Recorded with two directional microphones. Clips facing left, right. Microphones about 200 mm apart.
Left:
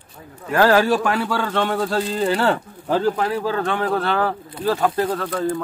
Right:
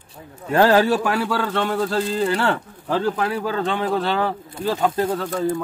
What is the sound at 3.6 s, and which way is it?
Speech, 15° right (ahead or behind).